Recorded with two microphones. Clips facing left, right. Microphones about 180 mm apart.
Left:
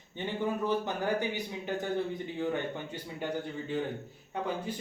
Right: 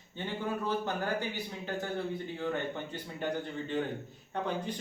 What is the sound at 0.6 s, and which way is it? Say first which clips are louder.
Speech: left 1 dB; 15° left (ahead or behind).